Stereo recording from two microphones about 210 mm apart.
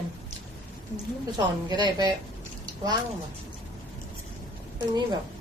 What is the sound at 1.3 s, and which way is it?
Speech, 20° right (ahead or behind).